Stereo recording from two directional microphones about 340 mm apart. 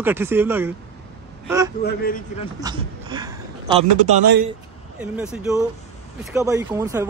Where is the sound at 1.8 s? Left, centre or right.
Left.